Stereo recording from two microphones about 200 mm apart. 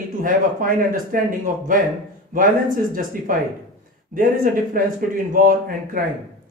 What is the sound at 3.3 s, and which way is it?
Speech, 45° right (ahead or behind).